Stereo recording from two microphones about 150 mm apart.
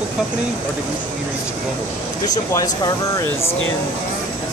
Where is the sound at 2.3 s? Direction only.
25° left (ahead or behind).